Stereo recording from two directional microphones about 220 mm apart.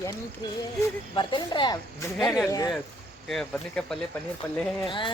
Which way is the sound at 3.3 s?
Centre (ahead or behind).